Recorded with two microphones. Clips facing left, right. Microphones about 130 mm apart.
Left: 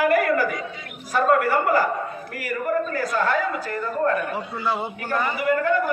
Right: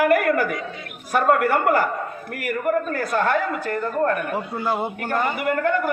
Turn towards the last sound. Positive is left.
turn(degrees=-55)  # may be behind; listen again after turning